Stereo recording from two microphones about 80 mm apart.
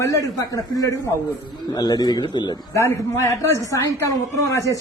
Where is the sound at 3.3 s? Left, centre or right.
Left.